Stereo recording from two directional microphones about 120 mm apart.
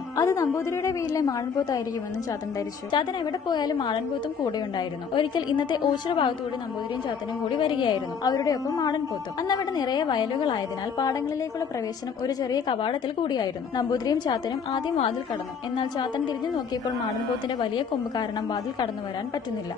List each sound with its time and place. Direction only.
0.1 s a woman's voice: 25° left (ahead or behind)
2.9 s a woman's voice: 35° left (ahead or behind)
7.4 s a woman's voice: 40° left (ahead or behind)
12.3 s a woman's voice: 35° left (ahead or behind)